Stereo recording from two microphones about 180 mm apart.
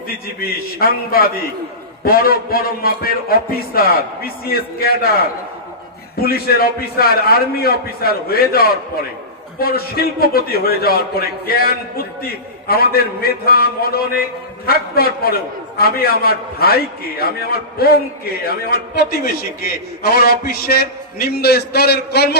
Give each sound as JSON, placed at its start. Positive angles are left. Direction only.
{"t": 0.4, "sound": "a man's voice", "side_deg": 55}
{"t": 6.2, "sound": "a man's voice", "side_deg": 60}
{"t": 20.0, "sound": "a man's voice", "side_deg": 55}